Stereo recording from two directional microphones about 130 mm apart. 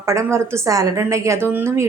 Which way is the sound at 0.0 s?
20° right (ahead or behind).